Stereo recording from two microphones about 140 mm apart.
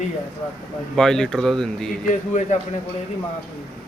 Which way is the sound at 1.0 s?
5° left (ahead or behind).